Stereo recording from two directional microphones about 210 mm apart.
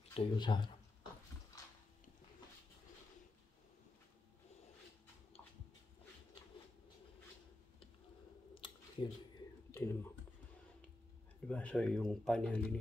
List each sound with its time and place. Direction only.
0.1 s speech: 25° left (ahead or behind)
8.5 s a sound: 25° left (ahead or behind)
9.7 s speech: 15° left (ahead or behind)
11.4 s speech: 5° left (ahead or behind)